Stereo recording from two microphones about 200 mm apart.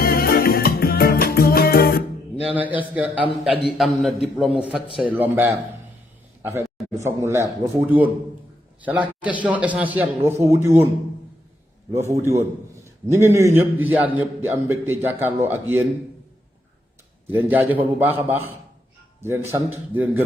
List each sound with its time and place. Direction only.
0.0 s music: 50° left (ahead or behind)
2.5 s a man's voice: 10° right (ahead or behind)
11.9 s a man's voice: 15° right (ahead or behind)
17.3 s a man's voice: 10° right (ahead or behind)